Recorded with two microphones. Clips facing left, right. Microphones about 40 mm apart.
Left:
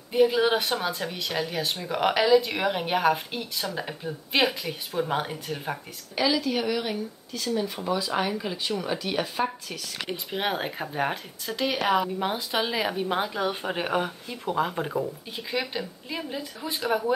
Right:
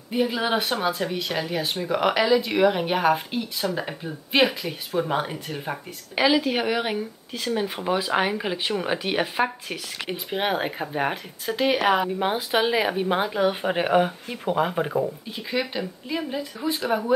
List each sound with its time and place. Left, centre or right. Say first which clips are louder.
0.1 s speech: left 2 dB; centre
0.6 s speech: right 2 dB; right
0.8 s speech: right 4 dB; centre
6.1 s speech: right 4 dB; right
10.0 s speech: right 3 dB; centre